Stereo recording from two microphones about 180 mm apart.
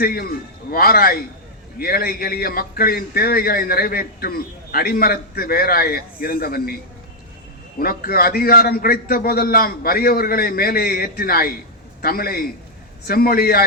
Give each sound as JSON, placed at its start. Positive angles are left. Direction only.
{"t": 0.0, "sound": "a man's voice", "side_deg": 55}